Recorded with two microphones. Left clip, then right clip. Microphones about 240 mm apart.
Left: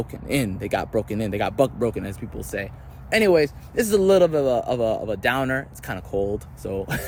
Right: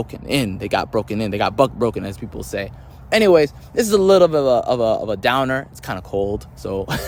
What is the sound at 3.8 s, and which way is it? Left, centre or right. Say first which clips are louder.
Speech: right 4 dB; centre.